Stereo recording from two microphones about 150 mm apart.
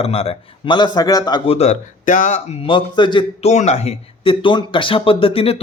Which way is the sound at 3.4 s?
50° left (ahead or behind).